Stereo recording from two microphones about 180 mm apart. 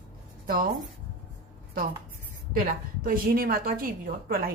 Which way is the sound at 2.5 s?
50° right (ahead or behind).